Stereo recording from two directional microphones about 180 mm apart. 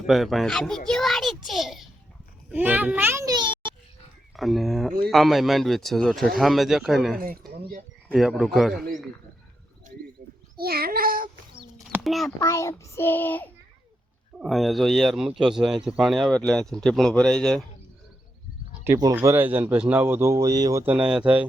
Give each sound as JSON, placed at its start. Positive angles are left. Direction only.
{"t": 0.1, "sound": "speech", "side_deg": 0}
{"t": 0.9, "sound": "child singing", "side_deg": 0}
{"t": 2.5, "sound": "a child's voice", "side_deg": -10}
{"t": 4.4, "sound": "speech", "side_deg": 0}
{"t": 10.6, "sound": "speech", "side_deg": -55}
{"t": 12.0, "sound": "speech", "side_deg": 0}
{"t": 12.4, "sound": "a child's voice", "side_deg": 15}
{"t": 14.3, "sound": "speech", "side_deg": 0}
{"t": 19.1, "sound": "speech", "side_deg": -10}